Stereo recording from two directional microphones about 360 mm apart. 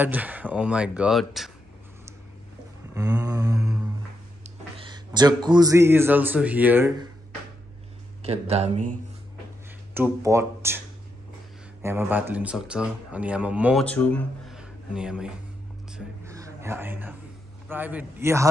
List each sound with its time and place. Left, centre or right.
0.0 s speech: centre
2.9 s a sound: centre
4.4 s speech: centre
8.2 s speech: centre
9.9 s speech: centre
11.8 s speech: centre
15.9 s a sound: centre
17.6 s speech: centre